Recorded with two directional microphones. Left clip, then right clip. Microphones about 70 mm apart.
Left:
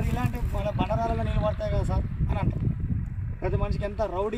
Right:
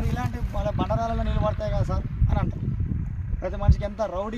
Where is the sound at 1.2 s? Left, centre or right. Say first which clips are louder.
Right 1 dB; centre.